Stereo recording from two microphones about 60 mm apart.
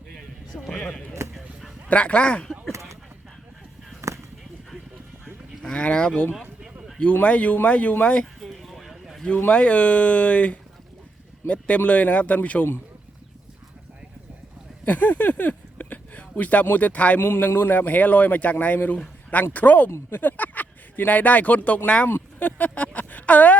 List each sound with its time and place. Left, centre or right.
0.2 s music: centre
0.8 s speech: centre
1.9 s a man's voice: left
4.0 s a sound: right
5.6 s a man's voice: centre
8.4 s a sound: centre
9.5 s a man's voice: left
14.8 s a sound: left
16.6 s a man's voice: left
17.2 s a man's voice: left
19.9 s a man's voice: left
22.1 s a sound: left